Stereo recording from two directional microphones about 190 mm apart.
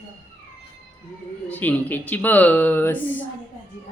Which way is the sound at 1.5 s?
10° left (ahead or behind).